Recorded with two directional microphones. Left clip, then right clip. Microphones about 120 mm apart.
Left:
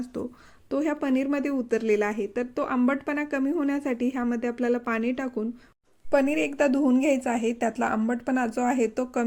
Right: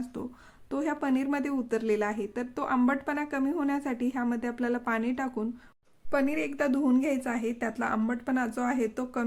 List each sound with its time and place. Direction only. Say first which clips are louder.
0.0 s a sound: left 5 dB; 25° left (ahead or behind)
0.7 s speech: left 4 dB; 20° left (ahead or behind)
6.1 s a woman's voice: left 5 dB; 35° left (ahead or behind)